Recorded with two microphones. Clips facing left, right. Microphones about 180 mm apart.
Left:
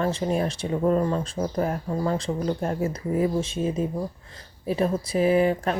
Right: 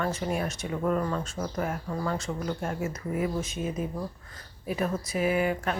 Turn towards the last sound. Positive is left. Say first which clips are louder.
# left 6 dB
turn(degrees=30)  # may be behind; listen again after turning